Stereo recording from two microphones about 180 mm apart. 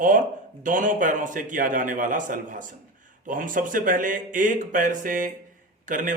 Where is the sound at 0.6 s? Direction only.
45° right (ahead or behind).